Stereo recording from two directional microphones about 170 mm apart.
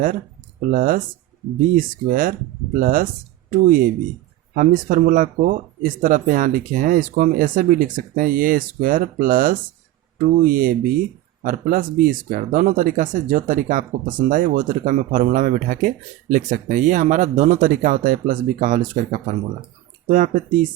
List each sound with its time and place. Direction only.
0.7 s speech: 55° right (ahead or behind)